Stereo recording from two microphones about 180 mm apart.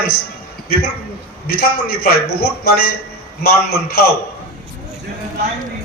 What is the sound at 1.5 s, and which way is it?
A man's voice, 60° left (ahead or behind).